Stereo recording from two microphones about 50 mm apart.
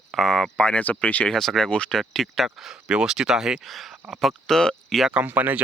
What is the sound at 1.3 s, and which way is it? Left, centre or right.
Speech, centre.